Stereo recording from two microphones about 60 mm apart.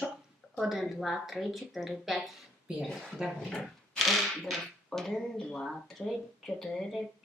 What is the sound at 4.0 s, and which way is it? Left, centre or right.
Speech, centre.